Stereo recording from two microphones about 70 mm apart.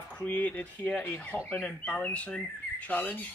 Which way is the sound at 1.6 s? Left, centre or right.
Left.